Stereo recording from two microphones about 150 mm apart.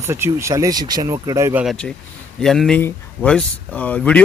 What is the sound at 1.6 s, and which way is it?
Speech, centre (ahead or behind).